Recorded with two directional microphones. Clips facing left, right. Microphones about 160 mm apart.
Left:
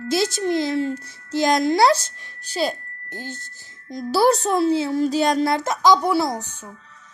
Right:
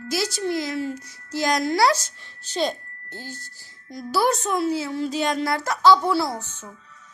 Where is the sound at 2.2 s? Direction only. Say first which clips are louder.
Left 1 dB; 15° left (ahead or behind).